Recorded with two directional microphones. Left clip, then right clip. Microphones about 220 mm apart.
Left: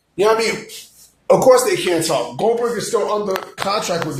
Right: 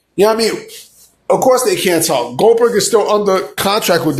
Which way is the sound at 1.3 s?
15° right (ahead or behind).